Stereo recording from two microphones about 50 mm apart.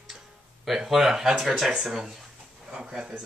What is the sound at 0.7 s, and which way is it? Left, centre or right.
Speech, centre.